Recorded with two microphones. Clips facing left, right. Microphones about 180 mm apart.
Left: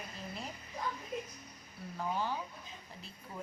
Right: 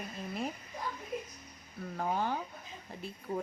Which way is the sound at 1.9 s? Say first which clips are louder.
Right 3 dB; 50° right (ahead or behind).